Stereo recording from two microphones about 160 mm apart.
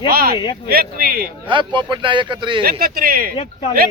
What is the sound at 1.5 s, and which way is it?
Speech, 30° right (ahead or behind).